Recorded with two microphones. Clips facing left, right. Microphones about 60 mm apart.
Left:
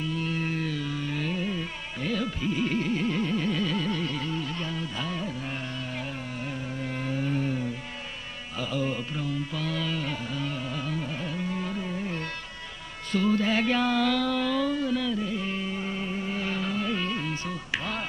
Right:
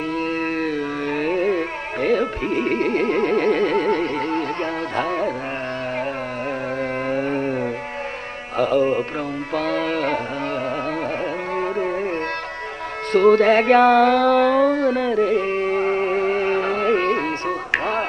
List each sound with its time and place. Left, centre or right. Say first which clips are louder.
0.1 s music: right 9 dB; right
6.8 s music: right 7 dB; right
9.5 s music: right 10 dB; right
11.5 s music: right 10 dB; right
13.1 s music: right 11 dB; right